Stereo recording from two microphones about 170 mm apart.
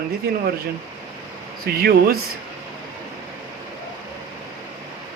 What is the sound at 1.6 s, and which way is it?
Speech, 60° right (ahead or behind).